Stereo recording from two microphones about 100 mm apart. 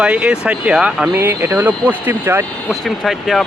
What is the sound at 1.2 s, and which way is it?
Speech, 25° right (ahead or behind).